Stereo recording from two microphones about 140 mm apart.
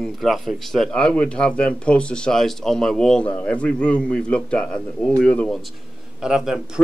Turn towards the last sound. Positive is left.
turn(degrees=-5)  # may be behind; listen again after turning